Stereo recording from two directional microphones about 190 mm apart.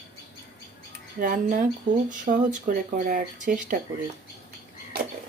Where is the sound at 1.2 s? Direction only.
45° right (ahead or behind).